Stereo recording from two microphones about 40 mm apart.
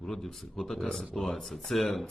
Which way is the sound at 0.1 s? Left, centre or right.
Centre.